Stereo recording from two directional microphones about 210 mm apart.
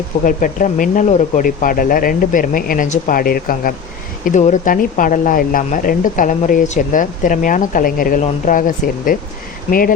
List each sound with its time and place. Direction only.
0.3 s speech: 40° left (ahead or behind)